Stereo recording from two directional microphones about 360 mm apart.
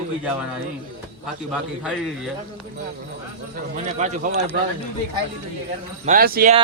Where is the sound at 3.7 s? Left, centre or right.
Centre.